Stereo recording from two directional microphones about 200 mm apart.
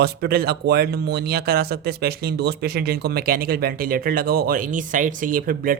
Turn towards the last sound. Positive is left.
turn(degrees=-45)  # may be behind; listen again after turning